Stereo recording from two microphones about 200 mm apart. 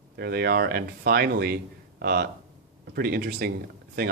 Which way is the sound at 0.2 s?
50° right (ahead or behind).